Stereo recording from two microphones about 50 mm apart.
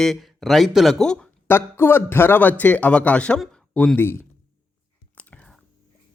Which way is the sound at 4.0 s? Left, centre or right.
Left.